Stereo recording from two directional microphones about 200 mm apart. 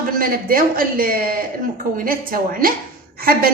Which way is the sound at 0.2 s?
45° right (ahead or behind).